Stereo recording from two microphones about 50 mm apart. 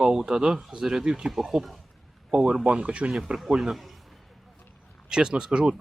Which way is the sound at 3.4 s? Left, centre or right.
Centre.